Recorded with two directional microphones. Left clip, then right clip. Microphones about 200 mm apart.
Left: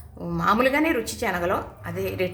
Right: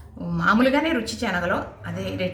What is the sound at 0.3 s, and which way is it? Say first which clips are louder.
Speech: right 1 dB; 20° left (ahead or behind).